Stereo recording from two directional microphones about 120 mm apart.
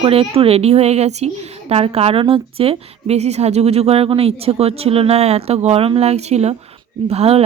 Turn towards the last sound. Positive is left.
turn(degrees=-55)  # may be behind; listen again after turning